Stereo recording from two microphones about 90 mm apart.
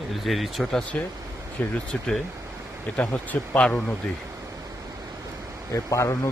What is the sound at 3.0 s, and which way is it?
Speech, 10° left (ahead or behind).